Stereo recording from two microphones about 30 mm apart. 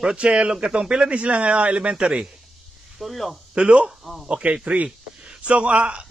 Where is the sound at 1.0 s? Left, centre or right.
Right.